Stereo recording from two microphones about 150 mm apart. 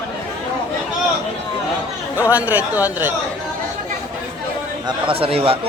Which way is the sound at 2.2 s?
10° right (ahead or behind).